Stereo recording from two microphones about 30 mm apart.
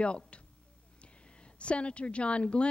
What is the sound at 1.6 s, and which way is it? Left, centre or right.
A woman's voice, left.